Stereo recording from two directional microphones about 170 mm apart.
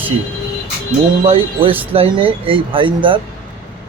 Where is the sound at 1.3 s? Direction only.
30° right (ahead or behind).